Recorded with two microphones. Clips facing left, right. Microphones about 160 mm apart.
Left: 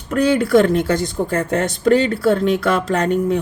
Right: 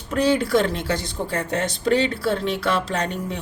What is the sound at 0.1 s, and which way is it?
Speech, 50° left (ahead or behind).